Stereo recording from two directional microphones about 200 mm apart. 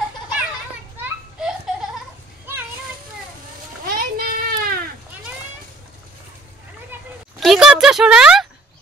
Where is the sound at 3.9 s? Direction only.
45° right (ahead or behind).